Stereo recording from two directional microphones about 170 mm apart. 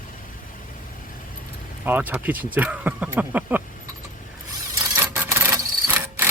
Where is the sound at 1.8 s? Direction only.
10° right (ahead or behind).